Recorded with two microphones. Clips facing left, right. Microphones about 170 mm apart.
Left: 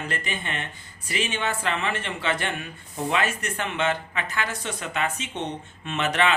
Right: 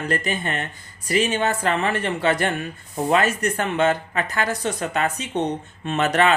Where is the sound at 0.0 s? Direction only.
40° right (ahead or behind).